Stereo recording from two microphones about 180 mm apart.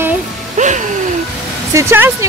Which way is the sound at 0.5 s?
45° right (ahead or behind).